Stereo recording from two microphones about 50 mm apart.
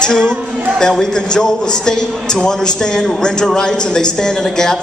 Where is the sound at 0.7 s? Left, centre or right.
Centre.